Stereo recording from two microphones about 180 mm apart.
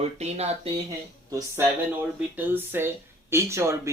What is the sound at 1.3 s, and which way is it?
Speech, 15° right (ahead or behind).